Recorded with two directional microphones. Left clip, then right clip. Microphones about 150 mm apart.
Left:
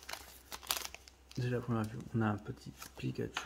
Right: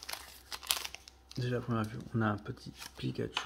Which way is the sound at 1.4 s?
5° right (ahead or behind).